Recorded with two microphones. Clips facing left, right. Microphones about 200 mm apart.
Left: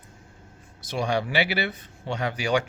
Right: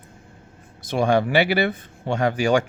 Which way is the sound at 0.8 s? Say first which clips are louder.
Right 7 dB; 55° right (ahead or behind).